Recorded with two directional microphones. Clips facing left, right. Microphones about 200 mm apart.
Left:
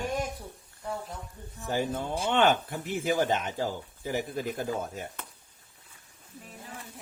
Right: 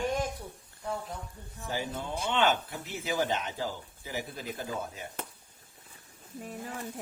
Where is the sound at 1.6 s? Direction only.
50° left (ahead or behind).